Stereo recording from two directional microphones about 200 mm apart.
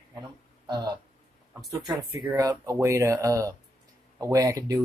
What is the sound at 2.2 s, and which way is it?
Speech, 20° right (ahead or behind).